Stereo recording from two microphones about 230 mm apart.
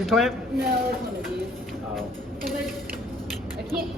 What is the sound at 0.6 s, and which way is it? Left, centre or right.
Speech, right.